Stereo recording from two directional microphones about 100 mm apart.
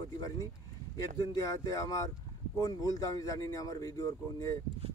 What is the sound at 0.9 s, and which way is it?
Speech, 35° left (ahead or behind).